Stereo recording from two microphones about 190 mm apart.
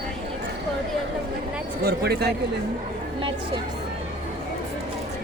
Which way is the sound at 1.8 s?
55° right (ahead or behind).